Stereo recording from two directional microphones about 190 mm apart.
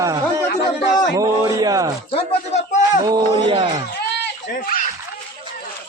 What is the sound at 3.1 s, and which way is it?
Speech, 25° right (ahead or behind).